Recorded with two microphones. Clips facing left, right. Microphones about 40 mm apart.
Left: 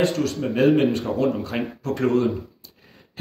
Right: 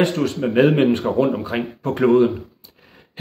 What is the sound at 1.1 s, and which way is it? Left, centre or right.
Speech, right.